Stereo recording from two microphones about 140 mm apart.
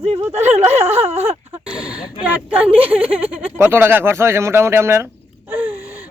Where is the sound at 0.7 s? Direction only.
50° right (ahead or behind).